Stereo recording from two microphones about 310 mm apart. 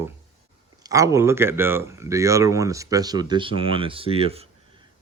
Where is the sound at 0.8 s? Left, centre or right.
Centre.